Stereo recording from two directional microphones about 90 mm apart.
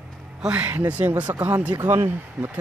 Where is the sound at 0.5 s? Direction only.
20° right (ahead or behind).